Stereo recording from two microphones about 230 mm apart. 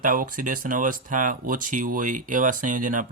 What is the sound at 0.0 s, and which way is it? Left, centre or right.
Speech, right.